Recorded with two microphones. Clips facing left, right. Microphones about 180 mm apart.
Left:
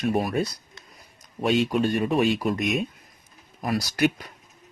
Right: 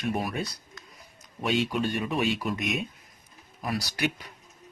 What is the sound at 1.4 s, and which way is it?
Speech, 40° left (ahead or behind).